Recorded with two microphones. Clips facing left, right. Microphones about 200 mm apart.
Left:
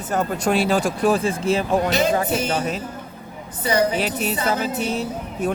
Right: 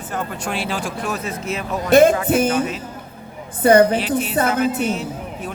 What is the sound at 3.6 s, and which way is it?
Speech, 55° right (ahead or behind).